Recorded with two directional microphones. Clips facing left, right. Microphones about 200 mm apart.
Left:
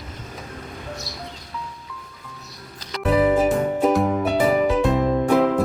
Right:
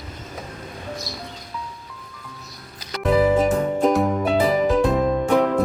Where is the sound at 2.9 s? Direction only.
5° left (ahead or behind).